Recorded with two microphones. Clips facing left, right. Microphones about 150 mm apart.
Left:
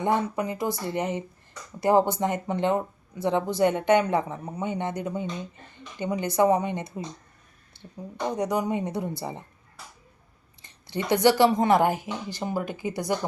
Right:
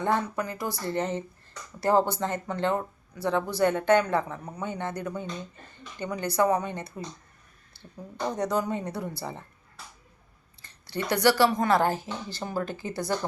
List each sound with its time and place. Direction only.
0.0 s speech: 20° left (ahead or behind)
10.6 s speech: 20° left (ahead or behind)